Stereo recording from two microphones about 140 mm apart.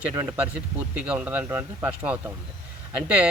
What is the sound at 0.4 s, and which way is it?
Speech, 10° right (ahead or behind).